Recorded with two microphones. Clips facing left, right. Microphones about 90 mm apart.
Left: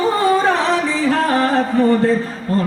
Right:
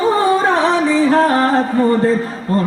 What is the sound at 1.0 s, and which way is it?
Music, 25° right (ahead or behind).